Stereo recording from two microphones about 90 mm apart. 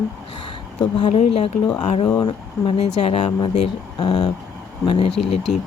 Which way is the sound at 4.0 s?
65° left (ahead or behind).